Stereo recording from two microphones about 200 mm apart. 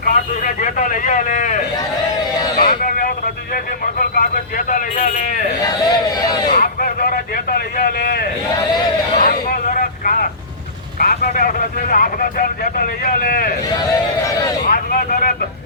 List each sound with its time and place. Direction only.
0.0 s a man's voice: 45° left (ahead or behind)
2.6 s vehicle: 45° left (ahead or behind)
3.9 s speech: 45° left (ahead or behind)
5.6 s speech: 20° left (ahead or behind)
6.5 s a sound: 45° left (ahead or behind)
9.1 s vehicle: 40° left (ahead or behind)
11.0 s speech: 50° left (ahead or behind)
14.7 s speech: 45° left (ahead or behind)